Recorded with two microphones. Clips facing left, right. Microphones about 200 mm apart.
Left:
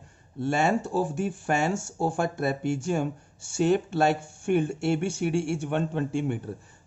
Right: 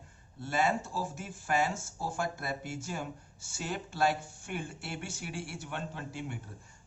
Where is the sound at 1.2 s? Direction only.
65° left (ahead or behind).